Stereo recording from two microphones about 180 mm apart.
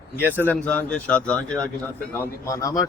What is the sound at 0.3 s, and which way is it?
A man's voice, 10° left (ahead or behind).